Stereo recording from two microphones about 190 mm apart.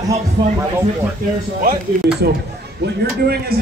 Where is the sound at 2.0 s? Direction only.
60° right (ahead or behind).